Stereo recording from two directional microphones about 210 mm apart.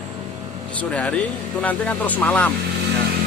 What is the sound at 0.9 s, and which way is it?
Speech, 5° left (ahead or behind).